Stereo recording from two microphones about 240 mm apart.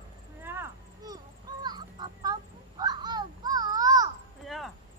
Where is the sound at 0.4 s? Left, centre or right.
Centre.